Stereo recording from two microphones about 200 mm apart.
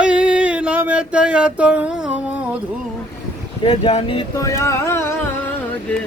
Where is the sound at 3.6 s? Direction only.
30° left (ahead or behind).